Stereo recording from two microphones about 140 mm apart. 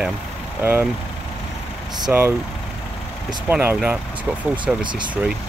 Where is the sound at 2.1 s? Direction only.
15° right (ahead or behind).